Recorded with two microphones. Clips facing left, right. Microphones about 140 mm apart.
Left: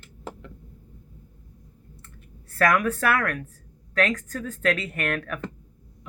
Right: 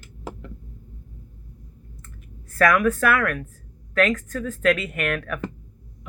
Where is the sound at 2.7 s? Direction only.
35° left (ahead or behind).